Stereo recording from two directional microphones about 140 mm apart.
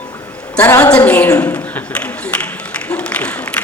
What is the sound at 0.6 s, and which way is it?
Speech, 20° left (ahead or behind).